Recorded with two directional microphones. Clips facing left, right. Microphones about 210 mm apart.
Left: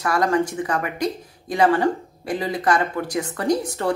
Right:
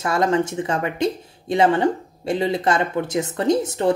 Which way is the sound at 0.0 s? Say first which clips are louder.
Right 1 dB; 25° right (ahead or behind).